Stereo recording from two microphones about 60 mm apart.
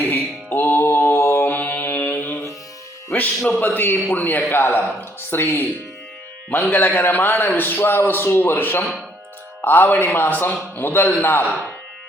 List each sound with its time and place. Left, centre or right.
0.0 s music: left
1.5 s mantra: left
3.1 s music: left
3.6 s a man's voice: left